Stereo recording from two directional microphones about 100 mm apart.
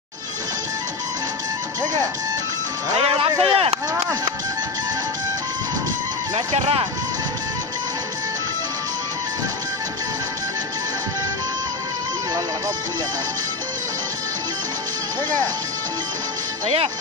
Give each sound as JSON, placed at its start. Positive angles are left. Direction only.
{"t": 3.0, "sound": "music", "side_deg": -60}
{"t": 3.9, "sound": "a sound", "side_deg": -35}
{"t": 6.3, "sound": "speech", "side_deg": -65}
{"t": 16.6, "sound": "speech", "side_deg": -75}